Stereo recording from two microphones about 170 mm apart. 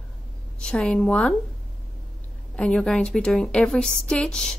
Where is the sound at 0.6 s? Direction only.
5° left (ahead or behind).